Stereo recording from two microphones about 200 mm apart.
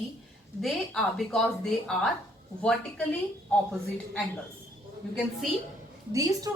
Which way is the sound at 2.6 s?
5° left (ahead or behind).